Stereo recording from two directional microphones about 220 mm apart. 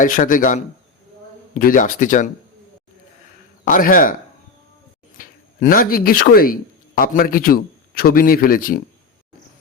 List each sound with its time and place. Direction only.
0.0 s speech: 35° left (ahead or behind)
3.6 s speech: 40° left (ahead or behind)
5.1 s speech: 40° left (ahead or behind)